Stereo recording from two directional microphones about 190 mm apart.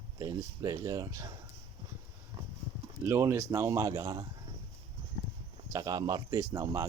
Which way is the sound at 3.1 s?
15° right (ahead or behind).